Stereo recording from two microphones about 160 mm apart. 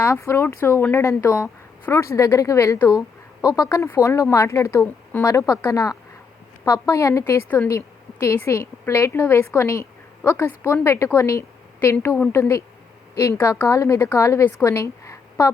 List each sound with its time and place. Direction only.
0.0 s a woman's voice: 15° left (ahead or behind)